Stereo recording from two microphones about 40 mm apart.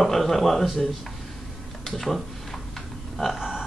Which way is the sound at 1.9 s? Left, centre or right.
Centre.